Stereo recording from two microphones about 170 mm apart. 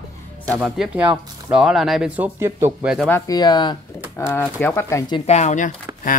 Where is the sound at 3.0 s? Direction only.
15° left (ahead or behind).